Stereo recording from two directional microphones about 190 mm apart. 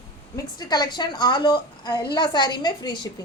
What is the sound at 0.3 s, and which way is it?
A woman's voice, 20° left (ahead or behind).